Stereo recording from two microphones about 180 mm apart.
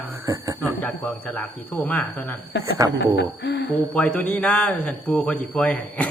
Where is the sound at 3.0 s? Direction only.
70° left (ahead or behind).